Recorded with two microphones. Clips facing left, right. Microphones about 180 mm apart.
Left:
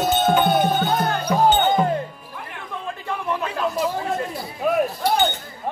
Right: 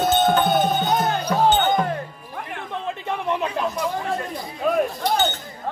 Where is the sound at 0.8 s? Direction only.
20° right (ahead or behind).